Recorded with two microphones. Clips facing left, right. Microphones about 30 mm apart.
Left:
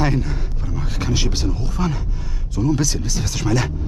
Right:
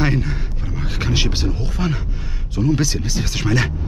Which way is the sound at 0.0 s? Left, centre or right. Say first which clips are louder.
Right 1 dB; centre.